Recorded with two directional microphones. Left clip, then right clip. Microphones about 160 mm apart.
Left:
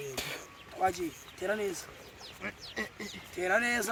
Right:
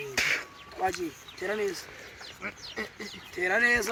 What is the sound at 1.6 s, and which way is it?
Speech, 20° left (ahead or behind).